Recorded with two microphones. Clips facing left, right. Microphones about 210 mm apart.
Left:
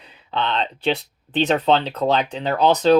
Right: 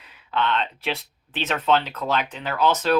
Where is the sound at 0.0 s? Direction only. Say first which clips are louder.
Even; 35° left (ahead or behind).